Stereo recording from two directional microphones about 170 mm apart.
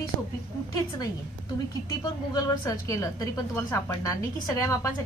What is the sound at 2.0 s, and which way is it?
A woman's voice, 20° left (ahead or behind).